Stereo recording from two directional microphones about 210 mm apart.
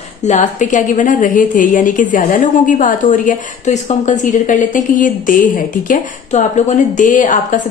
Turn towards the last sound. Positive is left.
turn(degrees=40)  # may be behind; listen again after turning